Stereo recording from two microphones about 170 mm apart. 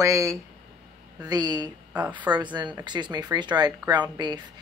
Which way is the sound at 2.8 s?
25° right (ahead or behind).